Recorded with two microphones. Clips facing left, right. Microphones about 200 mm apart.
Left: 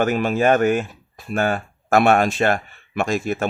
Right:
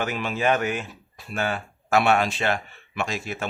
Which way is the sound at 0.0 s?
45° left (ahead or behind).